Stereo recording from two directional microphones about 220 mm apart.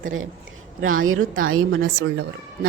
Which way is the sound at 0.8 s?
70° right (ahead or behind).